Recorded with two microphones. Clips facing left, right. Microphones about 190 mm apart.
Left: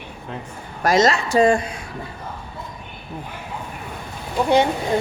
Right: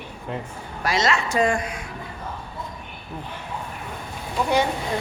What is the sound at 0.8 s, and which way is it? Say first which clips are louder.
Speech: left 6 dB; 45° left (ahead or behind).